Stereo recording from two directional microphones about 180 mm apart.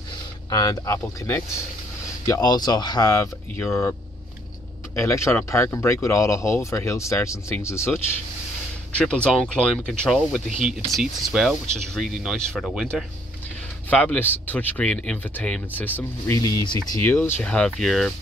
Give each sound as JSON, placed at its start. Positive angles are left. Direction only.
{"t": 0.5, "sound": "speech", "side_deg": 20}
{"t": 4.9, "sound": "speech", "side_deg": 15}